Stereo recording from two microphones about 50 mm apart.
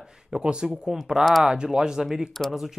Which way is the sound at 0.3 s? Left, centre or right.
Centre.